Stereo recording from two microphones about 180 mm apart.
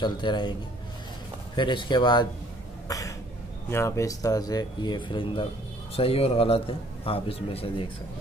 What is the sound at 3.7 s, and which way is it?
Speech, 15° left (ahead or behind).